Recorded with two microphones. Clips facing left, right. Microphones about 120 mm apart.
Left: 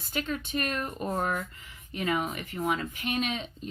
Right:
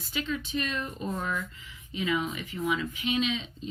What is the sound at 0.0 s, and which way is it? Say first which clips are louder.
Speech: even; 55° left (ahead or behind).